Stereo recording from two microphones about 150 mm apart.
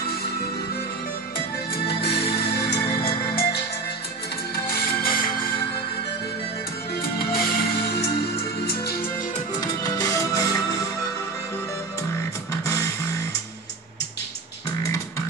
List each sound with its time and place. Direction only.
2.0 s music: 90° left
4.6 s music: 85° left
7.0 s music: 90° left
9.6 s music: 25° left (ahead or behind)
12.6 s music: 20° left (ahead or behind)